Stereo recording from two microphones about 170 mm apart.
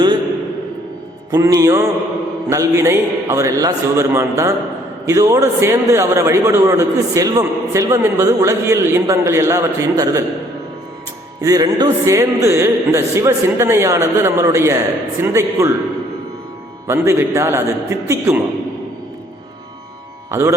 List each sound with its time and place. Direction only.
1.3 s a man's voice: 20° right (ahead or behind)
11.4 s a man's voice: 20° right (ahead or behind)
16.8 s a man's voice: 15° right (ahead or behind)
20.3 s a man's voice: 15° right (ahead or behind)